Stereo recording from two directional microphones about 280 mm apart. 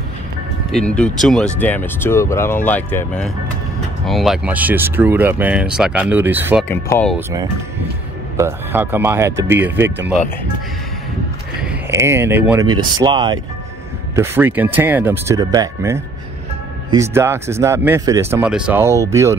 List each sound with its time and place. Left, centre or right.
0.7 s speech: centre
6.7 s speech: centre
7.2 s speech: centre
11.6 s speech: centre